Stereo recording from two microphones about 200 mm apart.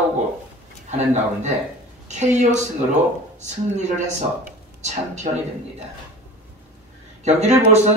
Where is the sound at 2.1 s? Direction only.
35° right (ahead or behind).